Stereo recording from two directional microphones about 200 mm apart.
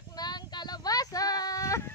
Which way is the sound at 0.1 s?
20° left (ahead or behind).